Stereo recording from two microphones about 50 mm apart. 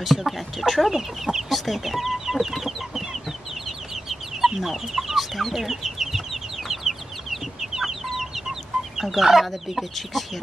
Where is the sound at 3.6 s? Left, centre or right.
Centre.